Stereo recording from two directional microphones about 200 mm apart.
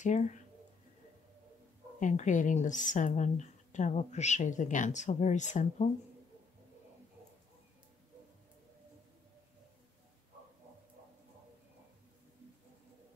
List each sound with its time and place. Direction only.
0.0 s a woman's voice: 35° left (ahead or behind)
2.0 s a woman's voice: 40° left (ahead or behind)